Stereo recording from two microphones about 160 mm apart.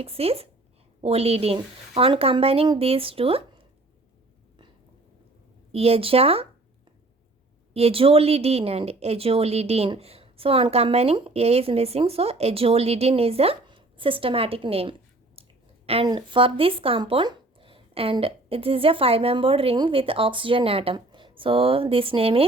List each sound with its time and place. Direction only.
0.0 s speech: 35° right (ahead or behind)
5.7 s speech: 40° right (ahead or behind)
7.7 s speech: 40° right (ahead or behind)